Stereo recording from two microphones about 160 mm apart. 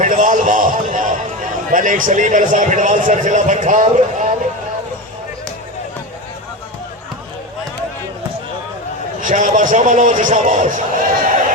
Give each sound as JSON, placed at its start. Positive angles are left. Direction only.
{"t": 0.0, "sound": "a sound", "side_deg": -55}
{"t": 1.7, "sound": "a man's voice", "side_deg": -55}
{"t": 9.2, "sound": "a man's voice", "side_deg": -55}